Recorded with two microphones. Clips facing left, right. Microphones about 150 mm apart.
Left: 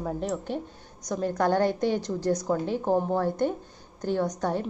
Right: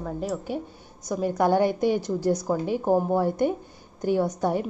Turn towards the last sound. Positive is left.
turn(degrees=-10)  # may be behind; listen again after turning